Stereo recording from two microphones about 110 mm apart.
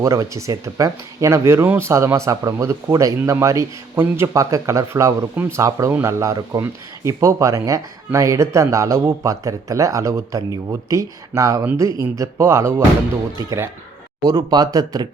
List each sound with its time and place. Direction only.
0.0 s speech: 25° right (ahead or behind)
14.3 s speech: 35° right (ahead or behind)